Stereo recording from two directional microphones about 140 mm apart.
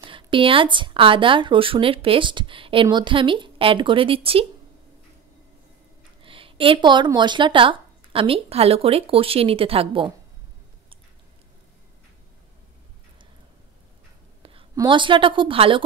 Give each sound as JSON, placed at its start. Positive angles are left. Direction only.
{"t": 0.0, "sound": "speech", "side_deg": -35}
{"t": 6.2, "sound": "a sound", "side_deg": -40}
{"t": 7.1, "sound": "speech", "side_deg": -35}
{"t": 14.8, "sound": "speech", "side_deg": -35}